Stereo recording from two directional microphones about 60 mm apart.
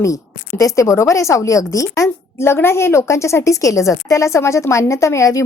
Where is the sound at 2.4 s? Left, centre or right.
Left.